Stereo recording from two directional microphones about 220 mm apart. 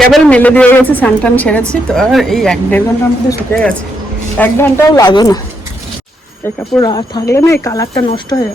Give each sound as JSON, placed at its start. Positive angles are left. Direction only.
{"t": 0.0, "sound": "a woman's voice", "side_deg": 5}
{"t": 6.7, "sound": "speech", "side_deg": 20}